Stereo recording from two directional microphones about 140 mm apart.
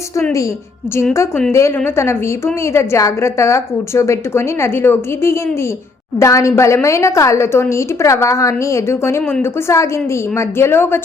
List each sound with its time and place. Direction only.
1.5 s a woman's voice: 20° left (ahead or behind)